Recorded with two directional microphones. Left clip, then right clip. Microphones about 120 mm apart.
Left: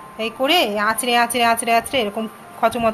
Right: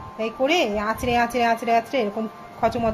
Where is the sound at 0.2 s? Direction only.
5° right (ahead or behind).